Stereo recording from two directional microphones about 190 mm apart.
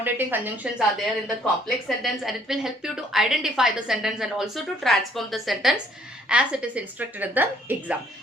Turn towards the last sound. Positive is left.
turn(degrees=-10)  # may be behind; listen again after turning